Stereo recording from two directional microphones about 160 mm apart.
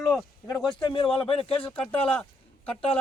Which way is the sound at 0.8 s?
35° left (ahead or behind).